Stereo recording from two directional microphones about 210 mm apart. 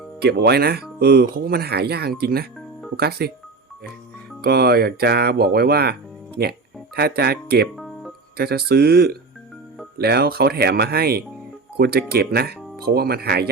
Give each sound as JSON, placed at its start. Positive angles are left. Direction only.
{"t": 0.2, "sound": "speech", "side_deg": -50}
{"t": 4.4, "sound": "speech", "side_deg": -45}